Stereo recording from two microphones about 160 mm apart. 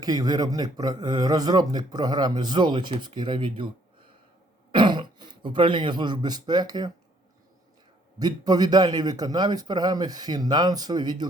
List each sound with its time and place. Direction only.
0.0 s speech: 25° right (ahead or behind)
4.7 s speech: 30° right (ahead or behind)
8.2 s speech: 25° right (ahead or behind)